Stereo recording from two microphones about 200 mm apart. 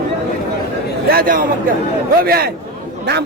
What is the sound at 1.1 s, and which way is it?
A man's voice, 45° right (ahead or behind).